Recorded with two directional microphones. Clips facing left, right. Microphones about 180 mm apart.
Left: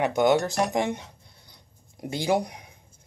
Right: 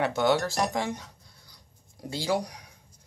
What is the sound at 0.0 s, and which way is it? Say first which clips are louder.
Speech: left 3 dB; 15° left (ahead or behind).